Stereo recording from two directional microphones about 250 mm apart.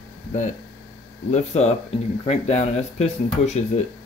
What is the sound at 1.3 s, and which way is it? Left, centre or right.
Speech, left.